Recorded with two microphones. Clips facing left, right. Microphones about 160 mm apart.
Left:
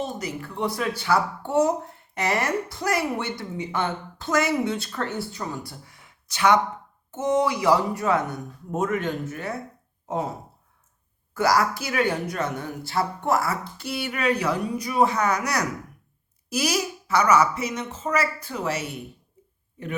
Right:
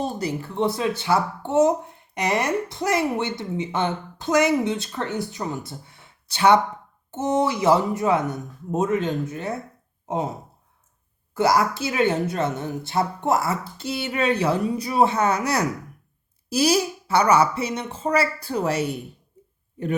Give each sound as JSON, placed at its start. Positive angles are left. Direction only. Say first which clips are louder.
{"t": 0.0, "sound": "speech", "louder": "right 4 dB", "side_deg": -35}
{"t": 11.3, "sound": "speech", "louder": "right 2 dB", "side_deg": -25}